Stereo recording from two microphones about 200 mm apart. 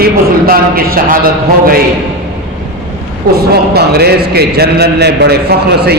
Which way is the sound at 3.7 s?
55° right (ahead or behind).